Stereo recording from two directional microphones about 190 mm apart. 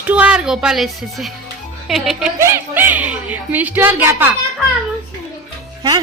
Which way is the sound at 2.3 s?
15° right (ahead or behind).